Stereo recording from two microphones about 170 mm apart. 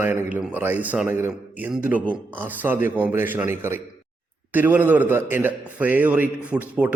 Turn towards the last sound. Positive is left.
turn(degrees=-10)  # may be behind; listen again after turning